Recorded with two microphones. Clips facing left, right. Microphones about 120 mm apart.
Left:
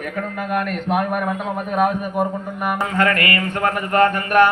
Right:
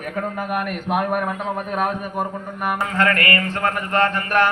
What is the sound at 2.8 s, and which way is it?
Speech, 25° left (ahead or behind).